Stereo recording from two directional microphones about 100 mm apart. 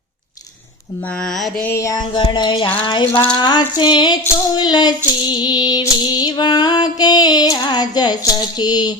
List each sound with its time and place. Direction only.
1.2 s mantra: centre (ahead or behind)
1.6 s a sound: 25° left (ahead or behind)
1.9 s music: 50° left (ahead or behind)